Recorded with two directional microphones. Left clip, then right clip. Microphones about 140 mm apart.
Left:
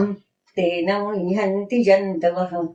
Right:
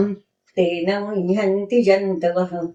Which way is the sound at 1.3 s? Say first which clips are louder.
Right 5 dB; 35° right (ahead or behind).